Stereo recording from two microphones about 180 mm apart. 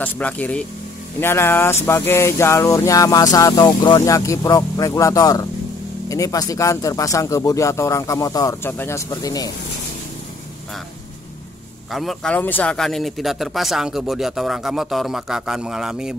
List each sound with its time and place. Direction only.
0.0 s speech: 10° left (ahead or behind)
1.9 s music: 15° left (ahead or behind)
6.0 s speech: 20° left (ahead or behind)
11.9 s speech: centre (ahead or behind)